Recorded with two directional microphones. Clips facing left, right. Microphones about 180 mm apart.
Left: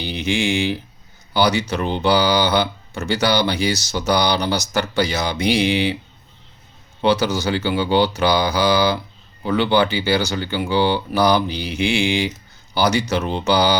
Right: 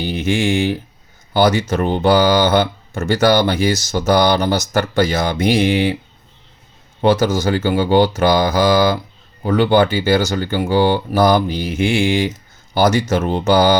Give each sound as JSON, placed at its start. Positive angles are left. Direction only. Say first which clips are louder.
{"t": 0.0, "sound": "a sound", "louder": "right 4 dB", "side_deg": -50}
{"t": 1.3, "sound": "speech", "louder": "right 4 dB", "side_deg": -50}
{"t": 7.0, "sound": "speech", "louder": "right 3 dB", "side_deg": -50}